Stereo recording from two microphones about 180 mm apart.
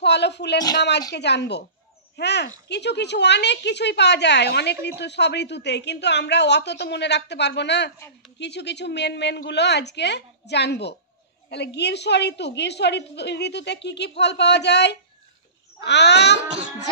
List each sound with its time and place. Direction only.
0.0 s a woman's voice: 70° left (ahead or behind)